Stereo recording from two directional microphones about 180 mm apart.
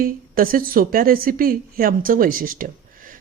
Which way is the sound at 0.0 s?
50° right (ahead or behind).